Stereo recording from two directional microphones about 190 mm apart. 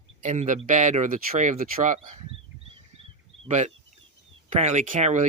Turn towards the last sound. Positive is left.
turn(degrees=-40)  # may be behind; listen again after turning